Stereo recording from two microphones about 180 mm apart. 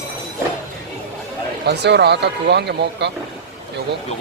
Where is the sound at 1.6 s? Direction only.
70° right (ahead or behind).